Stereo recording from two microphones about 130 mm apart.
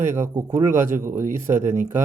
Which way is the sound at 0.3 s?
25° right (ahead or behind).